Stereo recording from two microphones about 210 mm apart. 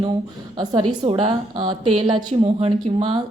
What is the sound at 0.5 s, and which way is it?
A woman's voice, 20° right (ahead or behind).